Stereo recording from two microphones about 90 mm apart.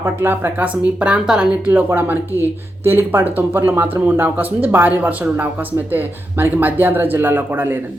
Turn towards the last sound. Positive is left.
turn(degrees=-25)  # may be behind; listen again after turning